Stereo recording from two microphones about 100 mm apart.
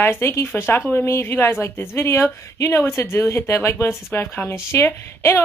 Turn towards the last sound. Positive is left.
turn(degrees=25)  # may be behind; listen again after turning